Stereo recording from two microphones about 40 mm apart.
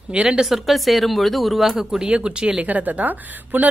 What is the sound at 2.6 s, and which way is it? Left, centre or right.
Speech, right.